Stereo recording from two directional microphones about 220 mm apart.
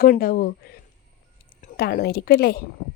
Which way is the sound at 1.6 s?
45° left (ahead or behind).